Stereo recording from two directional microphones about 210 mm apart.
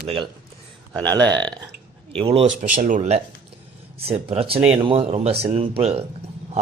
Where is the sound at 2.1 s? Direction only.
25° right (ahead or behind).